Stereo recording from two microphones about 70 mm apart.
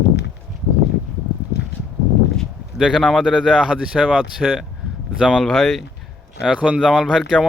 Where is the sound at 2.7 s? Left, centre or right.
Centre.